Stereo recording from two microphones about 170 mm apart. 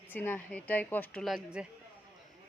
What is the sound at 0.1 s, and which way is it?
A woman's voice, 10° left (ahead or behind).